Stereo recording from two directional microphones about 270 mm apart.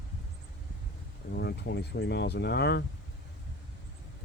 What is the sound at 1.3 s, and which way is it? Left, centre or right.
Speech, left.